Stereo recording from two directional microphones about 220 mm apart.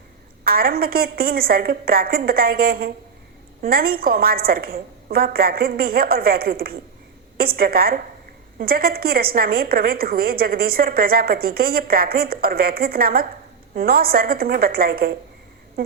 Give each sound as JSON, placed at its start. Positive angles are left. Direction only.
{"t": 0.4, "sound": "a woman's voice", "side_deg": -45}